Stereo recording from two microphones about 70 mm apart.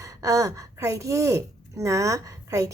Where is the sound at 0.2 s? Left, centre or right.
Right.